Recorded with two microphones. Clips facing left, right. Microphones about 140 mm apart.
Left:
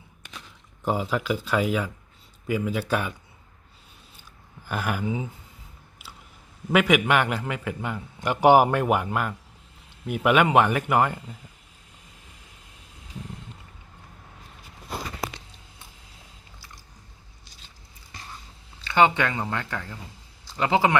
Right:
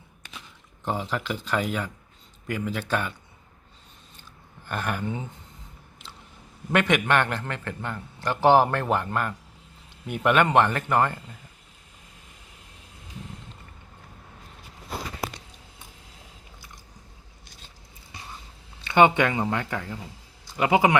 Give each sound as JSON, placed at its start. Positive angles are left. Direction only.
{"t": 0.9, "sound": "a man's voice", "side_deg": 10}
{"t": 4.6, "sound": "a man's voice", "side_deg": 5}
{"t": 6.7, "sound": "a man's voice", "side_deg": 5}
{"t": 18.9, "sound": "speech", "side_deg": -20}